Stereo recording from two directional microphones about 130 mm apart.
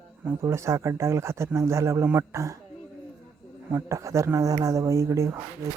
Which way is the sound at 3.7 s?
25° right (ahead or behind).